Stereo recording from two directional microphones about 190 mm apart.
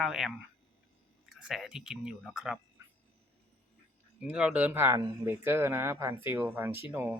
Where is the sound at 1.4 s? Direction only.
5° right (ahead or behind).